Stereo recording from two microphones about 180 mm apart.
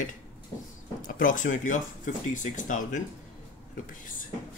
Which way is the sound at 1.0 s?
50° left (ahead or behind).